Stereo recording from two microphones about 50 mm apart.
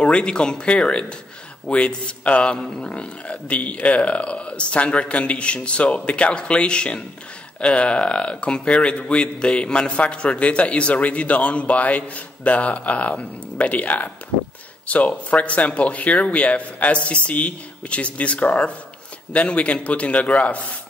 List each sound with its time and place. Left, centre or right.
0.0 s a man's voice: centre